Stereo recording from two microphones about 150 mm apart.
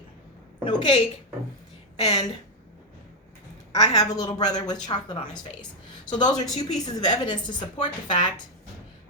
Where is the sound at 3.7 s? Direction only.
25° left (ahead or behind).